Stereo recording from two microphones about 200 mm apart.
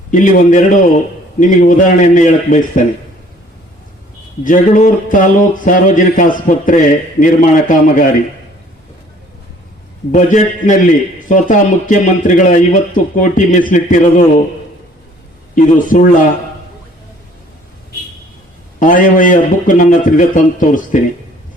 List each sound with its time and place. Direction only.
0.1 s speech: 40° left (ahead or behind)
4.4 s speech: 40° left (ahead or behind)
10.1 s speech: 40° left (ahead or behind)
15.5 s speech: 40° left (ahead or behind)
18.8 s speech: 40° left (ahead or behind)